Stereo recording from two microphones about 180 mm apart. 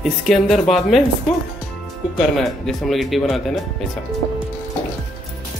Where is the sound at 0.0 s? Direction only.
Centre (ahead or behind).